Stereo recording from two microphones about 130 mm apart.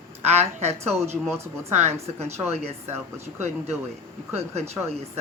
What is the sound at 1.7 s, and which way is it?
Speech, 60° right (ahead or behind).